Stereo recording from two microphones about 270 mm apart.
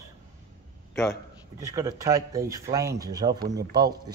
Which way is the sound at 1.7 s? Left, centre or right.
Centre.